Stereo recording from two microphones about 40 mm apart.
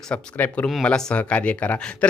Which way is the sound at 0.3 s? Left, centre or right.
Left.